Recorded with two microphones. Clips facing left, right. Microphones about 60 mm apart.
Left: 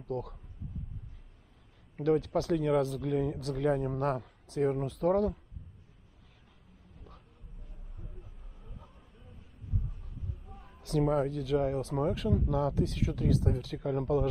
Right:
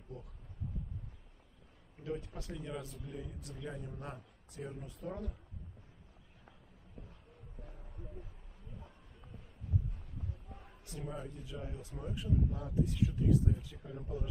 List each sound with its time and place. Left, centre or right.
0.1 s speech: left
2.0 s speech: left
10.8 s speech: left